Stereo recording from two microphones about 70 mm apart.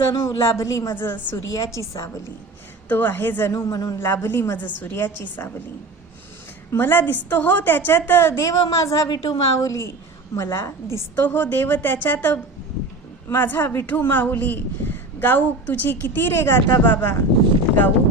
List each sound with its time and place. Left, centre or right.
0.2 s speech: left
0.9 s speech: left
1.4 s speech: left
2.9 s speech: left
3.7 s a man's voice: left
3.9 s a woman's voice: left
6.7 s speech: left
8.4 s speech: left
9.0 s a woman's voice: left
9.6 s a woman's voice: left
11.1 s speech: left